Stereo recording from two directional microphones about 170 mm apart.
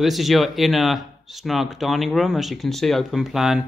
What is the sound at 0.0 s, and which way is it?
Speech, centre (ahead or behind).